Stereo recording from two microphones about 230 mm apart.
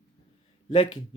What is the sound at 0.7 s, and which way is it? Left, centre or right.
Speech, left.